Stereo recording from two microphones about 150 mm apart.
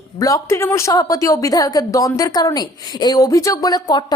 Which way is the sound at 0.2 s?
20° left (ahead or behind).